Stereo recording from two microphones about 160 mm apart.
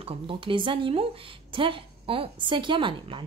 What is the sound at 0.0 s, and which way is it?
A woman's voice, 35° right (ahead or behind).